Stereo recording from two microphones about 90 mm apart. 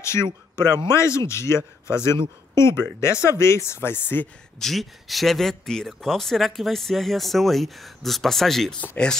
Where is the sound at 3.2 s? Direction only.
30° left (ahead or behind).